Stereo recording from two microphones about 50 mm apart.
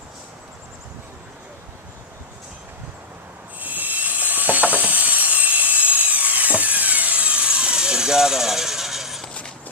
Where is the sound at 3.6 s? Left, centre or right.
Right; by 9.2 s centre.